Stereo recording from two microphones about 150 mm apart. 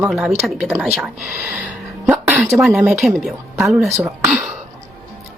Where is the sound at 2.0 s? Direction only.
10° right (ahead or behind).